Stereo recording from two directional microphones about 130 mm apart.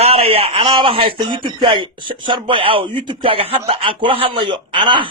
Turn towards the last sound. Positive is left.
turn(degrees=-40)  # may be behind; listen again after turning